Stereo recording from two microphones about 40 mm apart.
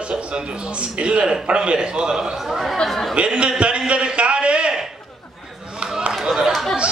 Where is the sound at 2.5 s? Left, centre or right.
Centre.